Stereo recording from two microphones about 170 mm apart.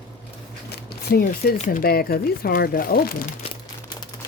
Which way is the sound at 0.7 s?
65° left (ahead or behind).